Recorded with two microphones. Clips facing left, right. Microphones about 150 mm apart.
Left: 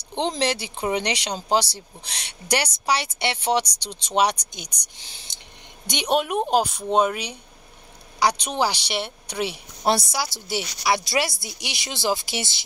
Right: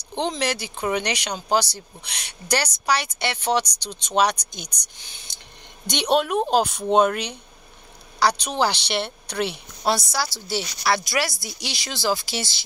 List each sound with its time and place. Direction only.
0.4 s speech: 25° left (ahead or behind)
5.9 s a woman's voice: 10° left (ahead or behind)
6.7 s speech: 5° left (ahead or behind)
8.2 s a woman's voice: 20° left (ahead or behind)